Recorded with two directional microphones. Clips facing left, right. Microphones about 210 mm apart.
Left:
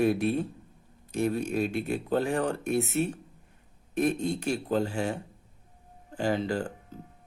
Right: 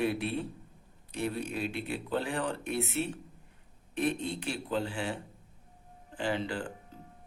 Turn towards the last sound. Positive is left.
turn(degrees=40)  # may be behind; listen again after turning